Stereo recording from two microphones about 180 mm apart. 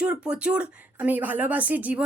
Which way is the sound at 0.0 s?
5° right (ahead or behind).